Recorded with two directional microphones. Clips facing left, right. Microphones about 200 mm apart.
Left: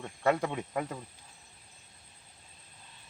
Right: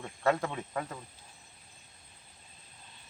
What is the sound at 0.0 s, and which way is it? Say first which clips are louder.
Speech: left 1 dB; 5° left (ahead or behind).